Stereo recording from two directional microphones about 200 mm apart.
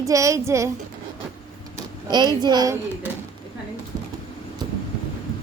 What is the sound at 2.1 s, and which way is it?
Speech, 20° right (ahead or behind).